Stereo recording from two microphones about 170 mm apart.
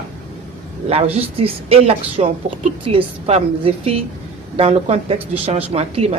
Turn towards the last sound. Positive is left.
turn(degrees=-40)  # may be behind; listen again after turning